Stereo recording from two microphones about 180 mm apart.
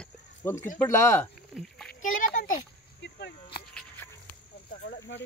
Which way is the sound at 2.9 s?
75° left (ahead or behind).